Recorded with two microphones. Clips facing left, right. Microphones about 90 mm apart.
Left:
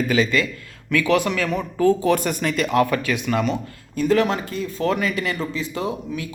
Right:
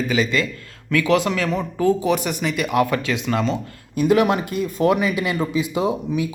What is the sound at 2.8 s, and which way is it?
Speech, 25° right (ahead or behind).